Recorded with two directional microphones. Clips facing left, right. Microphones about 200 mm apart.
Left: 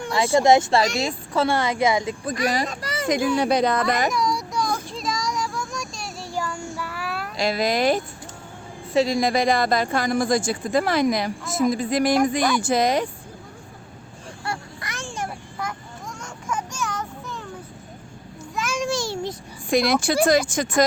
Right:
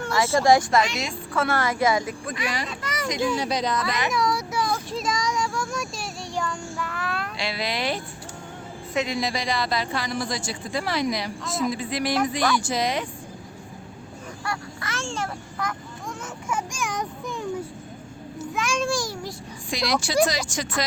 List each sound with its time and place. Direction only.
0.0 s speech: 15° left (ahead or behind)
0.8 s speech: 35° left (ahead or behind)
2.2 s speech: 40° left (ahead or behind)
3.3 s a child's voice: 55° left (ahead or behind)
4.1 s child singing: centre (ahead or behind)
7.3 s speech: 45° left (ahead or behind)
8.9 s a woman's voice: 35° left (ahead or behind)
9.2 s speech: 50° left (ahead or behind)
14.4 s a sound: 20° left (ahead or behind)
16.2 s a sound: 10° right (ahead or behind)
18.3 s a sound: centre (ahead or behind)
18.8 s child singing: 25° left (ahead or behind)
19.7 s speech: 55° left (ahead or behind)